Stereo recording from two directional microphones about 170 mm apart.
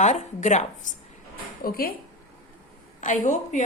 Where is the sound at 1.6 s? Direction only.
60° left (ahead or behind).